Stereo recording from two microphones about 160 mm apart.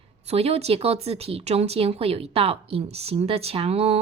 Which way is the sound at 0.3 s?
40° right (ahead or behind).